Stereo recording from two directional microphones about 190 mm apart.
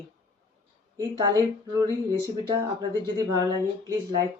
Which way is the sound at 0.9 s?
20° right (ahead or behind).